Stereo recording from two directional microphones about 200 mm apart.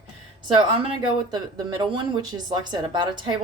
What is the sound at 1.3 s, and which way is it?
A woman's voice, 20° right (ahead or behind).